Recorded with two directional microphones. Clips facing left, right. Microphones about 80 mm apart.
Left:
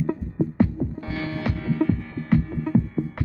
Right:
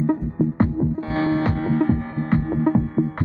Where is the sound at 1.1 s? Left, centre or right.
Right.